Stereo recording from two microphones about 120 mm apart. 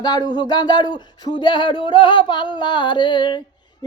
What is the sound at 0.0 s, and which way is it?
Speech, 35° left (ahead or behind).